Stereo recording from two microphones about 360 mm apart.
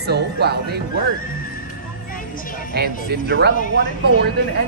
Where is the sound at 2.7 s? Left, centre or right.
Right.